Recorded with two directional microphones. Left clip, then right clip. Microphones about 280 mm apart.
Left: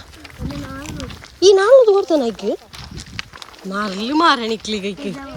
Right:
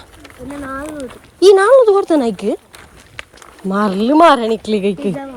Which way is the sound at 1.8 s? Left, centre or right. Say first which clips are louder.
Right 2 dB; right.